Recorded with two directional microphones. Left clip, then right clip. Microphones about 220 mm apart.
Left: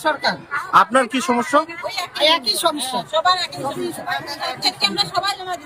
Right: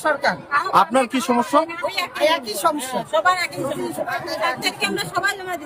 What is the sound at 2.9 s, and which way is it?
Speech, 15° right (ahead or behind).